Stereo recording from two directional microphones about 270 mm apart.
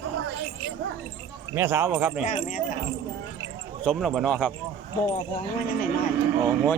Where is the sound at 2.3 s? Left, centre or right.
Left.